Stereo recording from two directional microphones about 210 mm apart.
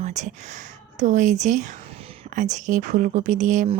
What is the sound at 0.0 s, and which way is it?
A woman's voice, 35° right (ahead or behind).